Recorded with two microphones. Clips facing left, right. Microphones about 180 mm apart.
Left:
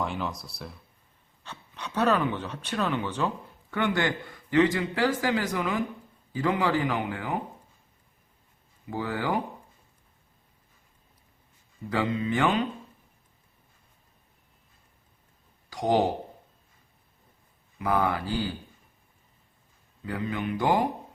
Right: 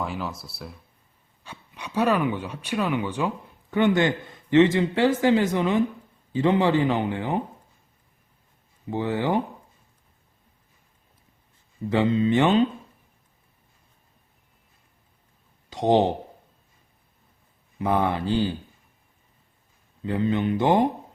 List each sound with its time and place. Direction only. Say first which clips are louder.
0.0 s speech: right 1 dB; centre (ahead or behind); by 7.4 s 25° right (ahead or behind)
8.9 s speech: right 5 dB; 20° right (ahead or behind)
11.9 s speech: right 6 dB; 25° right (ahead or behind)
15.7 s speech: right 4 dB; 25° right (ahead or behind)
17.7 s speech: right 3 dB; 25° right (ahead or behind)
20.1 s speech: right 7 dB; 25° right (ahead or behind)